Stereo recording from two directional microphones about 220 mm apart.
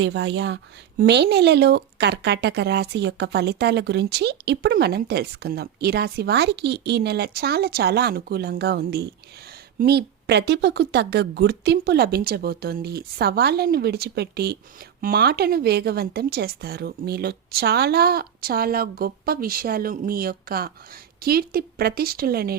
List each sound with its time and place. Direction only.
0.0 s speech: 55° right (ahead or behind)